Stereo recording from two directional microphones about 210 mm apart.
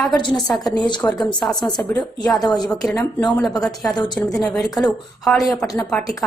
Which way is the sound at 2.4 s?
20° left (ahead or behind).